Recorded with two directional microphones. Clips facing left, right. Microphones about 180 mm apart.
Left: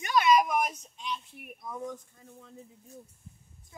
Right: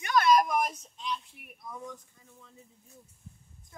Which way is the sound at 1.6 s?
50° left (ahead or behind).